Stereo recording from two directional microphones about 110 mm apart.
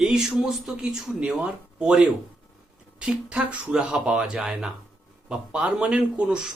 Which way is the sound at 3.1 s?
10° right (ahead or behind).